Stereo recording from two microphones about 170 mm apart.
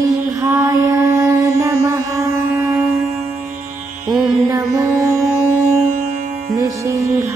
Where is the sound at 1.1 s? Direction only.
20° right (ahead or behind).